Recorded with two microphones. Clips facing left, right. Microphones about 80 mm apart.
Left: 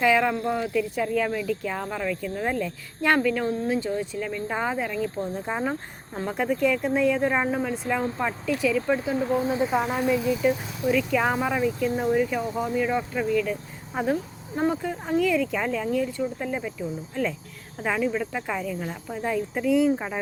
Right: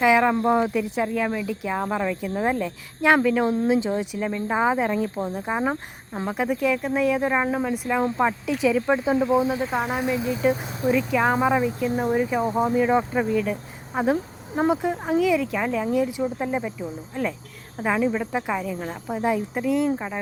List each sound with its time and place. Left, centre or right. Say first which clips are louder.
0.0 s speech: right 3 dB; centre
0.3 s speech: right 5 dB; right
1.1 s speech: even; centre; by 5.0 s right
5.1 s speech: right 2 dB; centre
9.6 s speech: left 1 dB; centre
10.0 s speech: even; right
11.1 s speech: right 2 dB; centre
11.3 s speech: right 3 dB; right
15.2 s speech: right 1 dB; centre